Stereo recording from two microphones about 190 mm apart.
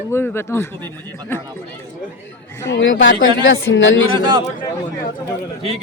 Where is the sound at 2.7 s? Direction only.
80° left.